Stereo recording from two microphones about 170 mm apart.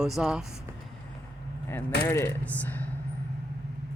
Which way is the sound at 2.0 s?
15° left (ahead or behind).